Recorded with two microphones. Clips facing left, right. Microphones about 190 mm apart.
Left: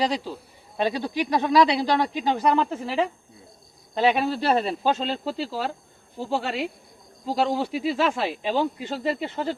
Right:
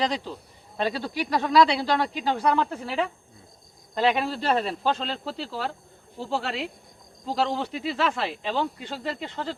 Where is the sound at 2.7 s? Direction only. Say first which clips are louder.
Left 3 dB; 5° left (ahead or behind).